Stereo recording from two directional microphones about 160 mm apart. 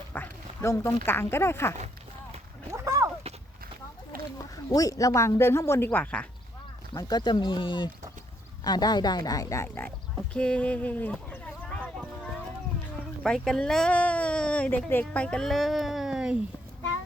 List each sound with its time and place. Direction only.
0.1 s dog: 15° left (ahead or behind)
1.0 s speech: 15° left (ahead or behind)
2.7 s a sound: 20° right (ahead or behind)
4.4 s speech: 20° left (ahead or behind)
6.9 s speech: 25° left (ahead or behind); by 11.9 s 10° left (ahead or behind)
13.2 s speech: 5° left (ahead or behind)
15.0 s a sound: 5° left (ahead or behind)